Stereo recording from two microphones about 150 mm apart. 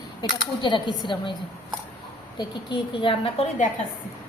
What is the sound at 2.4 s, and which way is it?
Speech, 30° left (ahead or behind).